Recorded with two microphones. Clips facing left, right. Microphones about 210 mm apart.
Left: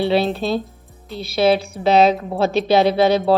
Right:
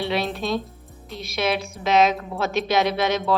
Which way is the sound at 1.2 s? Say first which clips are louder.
Left 8 dB; 30° left (ahead or behind).